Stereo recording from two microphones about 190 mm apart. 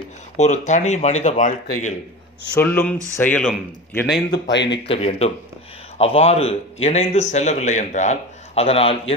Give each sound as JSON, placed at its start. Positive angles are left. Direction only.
{"t": 0.4, "sound": "speech", "side_deg": 40}
{"t": 2.5, "sound": "a man's voice", "side_deg": 10}
{"t": 4.3, "sound": "speech", "side_deg": 65}
{"t": 4.8, "sound": "speech", "side_deg": 30}